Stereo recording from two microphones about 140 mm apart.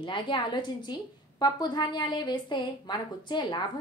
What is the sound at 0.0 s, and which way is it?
A woman's voice, 35° left (ahead or behind).